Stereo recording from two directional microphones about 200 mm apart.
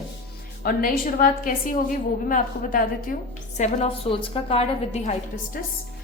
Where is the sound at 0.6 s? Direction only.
45° left (ahead or behind).